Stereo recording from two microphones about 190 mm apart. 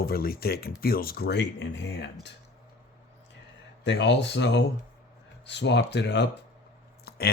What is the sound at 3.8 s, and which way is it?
Speech, 65° left (ahead or behind).